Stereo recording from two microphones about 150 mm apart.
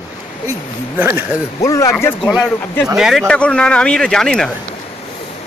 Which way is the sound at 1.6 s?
20° left (ahead or behind).